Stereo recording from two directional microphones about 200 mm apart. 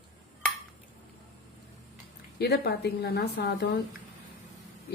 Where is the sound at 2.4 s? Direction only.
55° left (ahead or behind).